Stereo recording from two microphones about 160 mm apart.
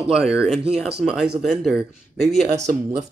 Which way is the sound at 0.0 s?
5° right (ahead or behind).